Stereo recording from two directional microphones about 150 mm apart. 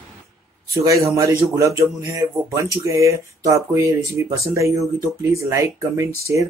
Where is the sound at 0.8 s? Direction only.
20° right (ahead or behind).